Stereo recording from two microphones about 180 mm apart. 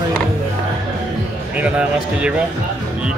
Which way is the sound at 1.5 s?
5° right (ahead or behind).